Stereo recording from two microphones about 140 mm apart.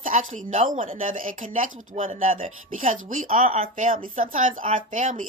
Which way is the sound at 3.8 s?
70° right (ahead or behind).